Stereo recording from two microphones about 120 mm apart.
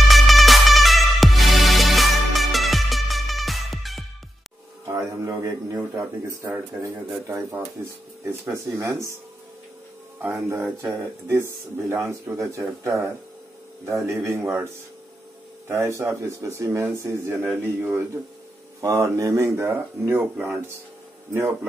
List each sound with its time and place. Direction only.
0.1 s music: centre (ahead or behind)
4.8 s a sound: 25° right (ahead or behind)
6.8 s speech: 25° right (ahead or behind)
10.5 s speech: 20° right (ahead or behind)
16.0 s speech: 20° right (ahead or behind)
18.8 s speech: 25° right (ahead or behind)